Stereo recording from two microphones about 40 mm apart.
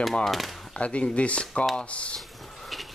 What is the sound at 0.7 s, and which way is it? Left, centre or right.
Speech, left.